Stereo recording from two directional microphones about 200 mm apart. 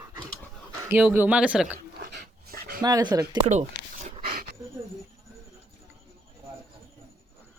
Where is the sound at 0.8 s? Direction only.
10° right (ahead or behind).